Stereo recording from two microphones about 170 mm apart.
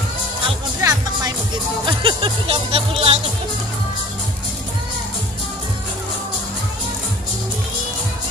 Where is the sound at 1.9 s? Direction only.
30° right (ahead or behind).